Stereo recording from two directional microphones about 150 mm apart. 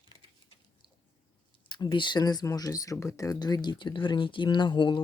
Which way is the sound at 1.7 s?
30° left (ahead or behind).